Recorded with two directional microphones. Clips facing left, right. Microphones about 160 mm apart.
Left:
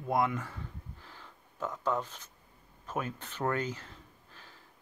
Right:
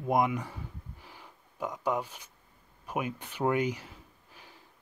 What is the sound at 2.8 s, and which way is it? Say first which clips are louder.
Speech: right 2 dB; 15° right (ahead or behind).